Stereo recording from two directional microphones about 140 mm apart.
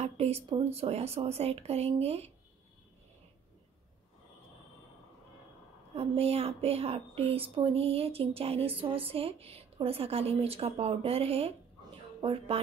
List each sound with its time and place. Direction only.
0.0 s speech: 45° right (ahead or behind)
5.9 s speech: 45° right (ahead or behind)